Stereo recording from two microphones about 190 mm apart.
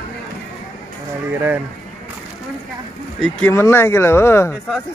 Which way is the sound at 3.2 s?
10° left (ahead or behind).